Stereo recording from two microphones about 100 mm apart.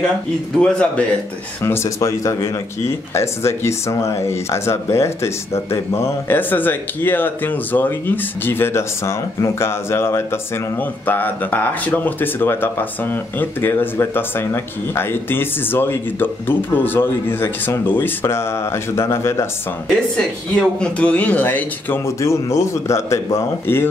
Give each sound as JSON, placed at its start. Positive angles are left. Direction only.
{"t": 0.6, "sound": "speech", "side_deg": 10}
{"t": 1.6, "sound": "speech", "side_deg": 25}
{"t": 20.2, "sound": "speech", "side_deg": 10}